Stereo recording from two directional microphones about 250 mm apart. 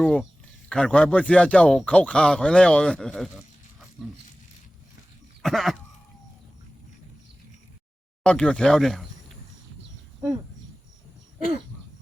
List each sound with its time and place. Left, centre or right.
0.0 s speech: centre
5.4 s throat clearing: centre
8.2 s speech: centre